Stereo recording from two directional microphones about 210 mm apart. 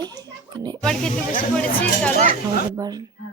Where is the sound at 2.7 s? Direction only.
20° right (ahead or behind).